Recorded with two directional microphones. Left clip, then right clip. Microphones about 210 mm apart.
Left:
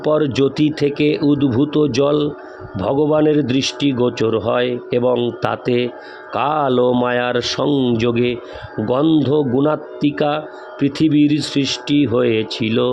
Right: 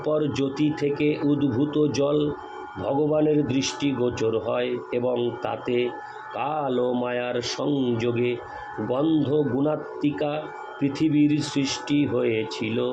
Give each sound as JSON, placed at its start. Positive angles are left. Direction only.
{"t": 0.0, "sound": "speech", "side_deg": 50}